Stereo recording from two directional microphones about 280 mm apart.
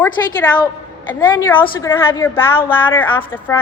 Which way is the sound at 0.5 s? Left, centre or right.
Centre.